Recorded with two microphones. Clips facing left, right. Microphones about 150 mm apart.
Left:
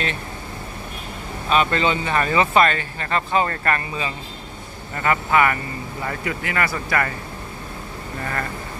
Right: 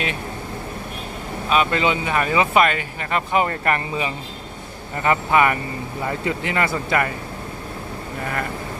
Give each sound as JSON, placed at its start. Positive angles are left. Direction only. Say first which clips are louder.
{"t": 1.5, "sound": "speech", "louder": "even", "side_deg": -5}